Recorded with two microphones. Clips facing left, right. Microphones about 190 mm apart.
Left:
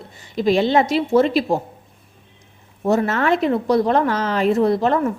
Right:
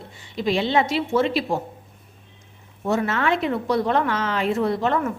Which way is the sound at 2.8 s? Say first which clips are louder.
Left 4 dB; 40° left (ahead or behind).